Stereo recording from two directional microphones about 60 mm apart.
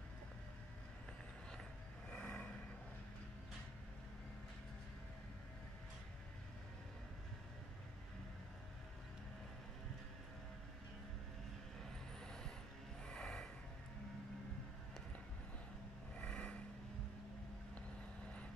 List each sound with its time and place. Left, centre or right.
2.0 s vehicle: left
12.2 s vehicle: centre
13.0 s a sound: centre
16.2 s vehicle: centre